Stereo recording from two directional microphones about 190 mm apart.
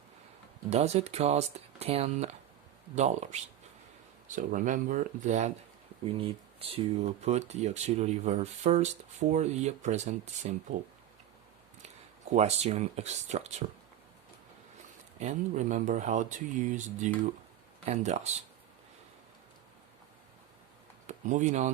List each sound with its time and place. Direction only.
0.7 s speech: 35° right (ahead or behind)
11.8 s speech: 35° right (ahead or behind)
15.2 s speech: 40° right (ahead or behind)
21.1 s speech: 40° right (ahead or behind)